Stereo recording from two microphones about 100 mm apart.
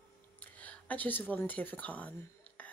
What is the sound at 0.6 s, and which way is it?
Speech, 15° left (ahead or behind).